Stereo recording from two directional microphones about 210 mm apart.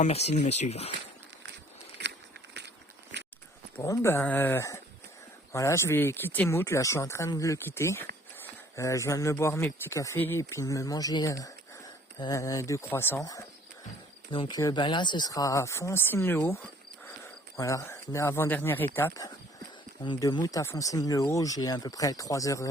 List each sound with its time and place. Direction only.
0.0 s speech: 30° left (ahead or behind)
3.1 s a sound: 55° right (ahead or behind)
3.8 s speech: 10° left (ahead or behind)
17.6 s speech: 15° left (ahead or behind)